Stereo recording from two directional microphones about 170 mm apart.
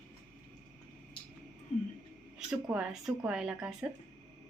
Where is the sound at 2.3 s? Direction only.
5° right (ahead or behind).